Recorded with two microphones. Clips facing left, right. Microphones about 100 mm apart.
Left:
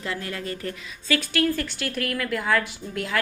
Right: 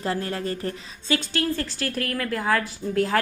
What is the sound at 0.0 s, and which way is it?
A woman's voice, 35° right (ahead or behind).